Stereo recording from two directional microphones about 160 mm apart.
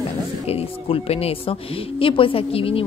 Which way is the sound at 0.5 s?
35° left (ahead or behind).